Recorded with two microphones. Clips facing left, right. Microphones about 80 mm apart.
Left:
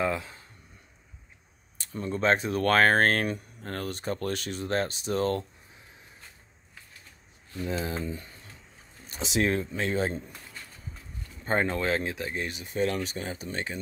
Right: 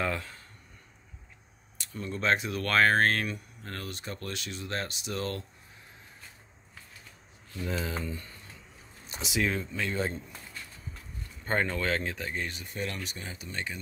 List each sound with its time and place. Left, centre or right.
0.0 s a sound: centre
1.8 s speech: left
7.6 s speech: left
9.7 s speech: left
11.4 s speech: left
12.7 s speech: left